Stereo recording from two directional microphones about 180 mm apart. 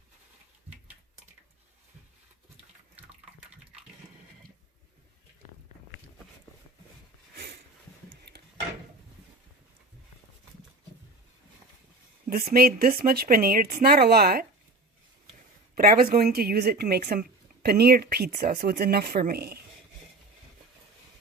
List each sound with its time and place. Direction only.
12.3 s speech: 55° right (ahead or behind)
15.7 s speech: 55° right (ahead or behind)